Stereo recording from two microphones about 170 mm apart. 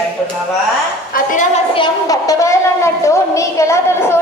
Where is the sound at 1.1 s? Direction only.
50° left (ahead or behind).